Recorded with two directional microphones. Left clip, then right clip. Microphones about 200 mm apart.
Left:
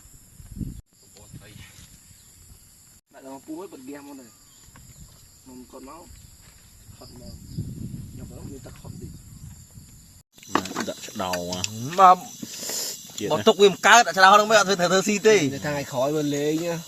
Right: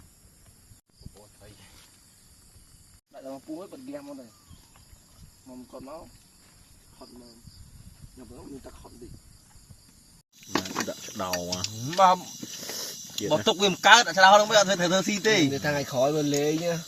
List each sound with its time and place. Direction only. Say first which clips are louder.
3.2 s snake: right 1 dB; 40° right (ahead or behind)
10.4 s a sound: left 3 dB; 10° left (ahead or behind)
11.4 s speech: left 2 dB; centre (ahead or behind)
11.9 s speech: left 5 dB; 50° left (ahead or behind)
12.5 s a sound: left 5 dB; 5° left (ahead or behind)
13.2 s speech: left 6 dB; 50° left (ahead or behind)
15.5 s speech: even; 40° right (ahead or behind)